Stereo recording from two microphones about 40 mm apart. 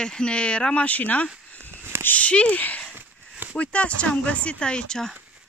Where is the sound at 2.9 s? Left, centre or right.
Right.